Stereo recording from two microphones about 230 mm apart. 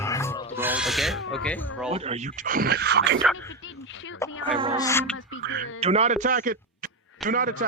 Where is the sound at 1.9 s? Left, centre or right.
Right.